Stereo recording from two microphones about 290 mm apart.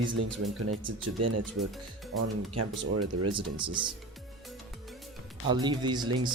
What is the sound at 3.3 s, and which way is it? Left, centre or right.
Speech, centre.